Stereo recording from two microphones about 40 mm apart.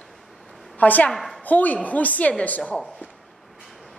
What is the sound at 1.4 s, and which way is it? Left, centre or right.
Speech, left.